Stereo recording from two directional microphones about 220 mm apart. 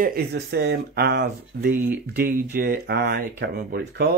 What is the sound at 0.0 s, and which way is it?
Speech, 45° right (ahead or behind).